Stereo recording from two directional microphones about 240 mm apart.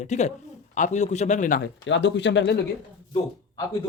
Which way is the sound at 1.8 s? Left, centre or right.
Left.